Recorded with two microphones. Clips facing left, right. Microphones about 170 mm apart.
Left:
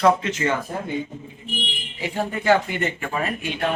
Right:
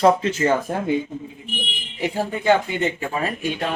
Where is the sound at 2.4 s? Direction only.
20° right (ahead or behind).